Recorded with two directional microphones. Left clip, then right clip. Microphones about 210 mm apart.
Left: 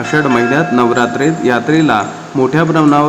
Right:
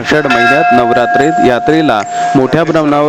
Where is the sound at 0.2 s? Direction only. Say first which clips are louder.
Right 3 dB; 50° right (ahead or behind).